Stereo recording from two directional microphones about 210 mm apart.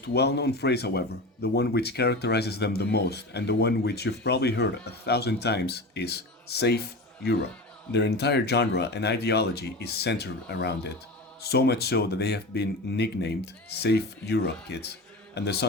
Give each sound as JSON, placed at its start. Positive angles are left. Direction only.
{"t": 0.0, "sound": "speech", "side_deg": 50}
{"t": 7.9, "sound": "speech", "side_deg": 55}